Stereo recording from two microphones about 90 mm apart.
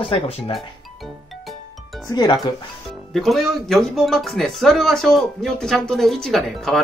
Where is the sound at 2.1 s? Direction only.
50° left (ahead or behind).